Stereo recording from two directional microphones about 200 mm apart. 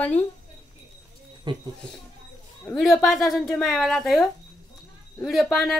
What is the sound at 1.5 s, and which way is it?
Speech, 25° right (ahead or behind).